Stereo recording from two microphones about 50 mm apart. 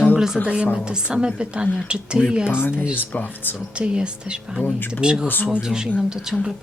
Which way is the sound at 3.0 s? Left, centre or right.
Left.